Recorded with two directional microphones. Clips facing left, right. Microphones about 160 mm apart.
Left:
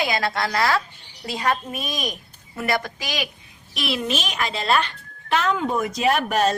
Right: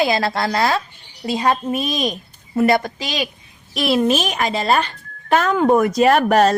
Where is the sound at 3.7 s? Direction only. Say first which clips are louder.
Right 9 dB; 40° right (ahead or behind).